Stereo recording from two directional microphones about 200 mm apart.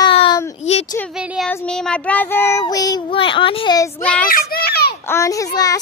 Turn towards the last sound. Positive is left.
turn(degrees=15)  # may be behind; listen again after turning